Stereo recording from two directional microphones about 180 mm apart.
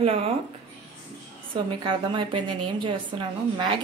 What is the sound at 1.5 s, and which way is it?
A woman's voice, 30° right (ahead or behind).